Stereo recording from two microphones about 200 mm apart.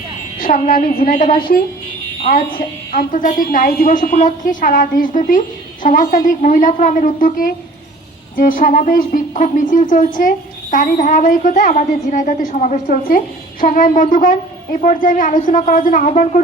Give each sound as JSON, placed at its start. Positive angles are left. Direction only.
{"t": 0.3, "sound": "speech", "side_deg": 45}
{"t": 2.9, "sound": "speech", "side_deg": 40}